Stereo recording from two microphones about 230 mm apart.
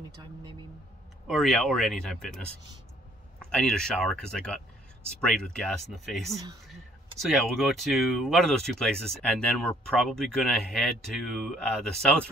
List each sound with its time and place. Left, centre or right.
0.2 s speech: centre
1.2 s speech: centre
3.4 s speech: centre